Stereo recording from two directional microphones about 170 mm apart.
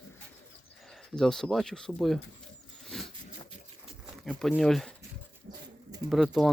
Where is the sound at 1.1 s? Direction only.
5° left (ahead or behind).